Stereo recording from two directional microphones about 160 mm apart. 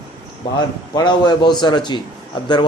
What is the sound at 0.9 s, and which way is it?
A man's voice, 25° left (ahead or behind).